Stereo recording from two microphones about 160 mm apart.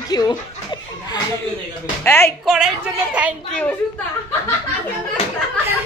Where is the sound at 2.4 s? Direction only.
Centre (ahead or behind).